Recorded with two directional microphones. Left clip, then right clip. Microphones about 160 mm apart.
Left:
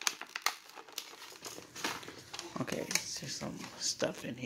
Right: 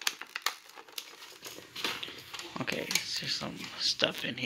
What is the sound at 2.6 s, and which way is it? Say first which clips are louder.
Speech: right 4 dB; 10° left (ahead or behind).